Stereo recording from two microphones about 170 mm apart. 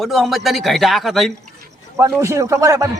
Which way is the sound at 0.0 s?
Centre (ahead or behind).